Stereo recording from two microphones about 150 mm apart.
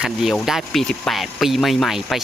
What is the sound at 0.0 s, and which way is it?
Speech, 5° right (ahead or behind).